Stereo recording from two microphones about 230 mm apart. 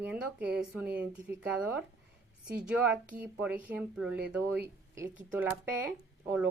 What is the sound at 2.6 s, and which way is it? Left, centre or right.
Speech, centre.